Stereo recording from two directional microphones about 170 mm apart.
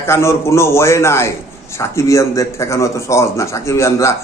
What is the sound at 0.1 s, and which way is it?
A man's voice, 15° left (ahead or behind).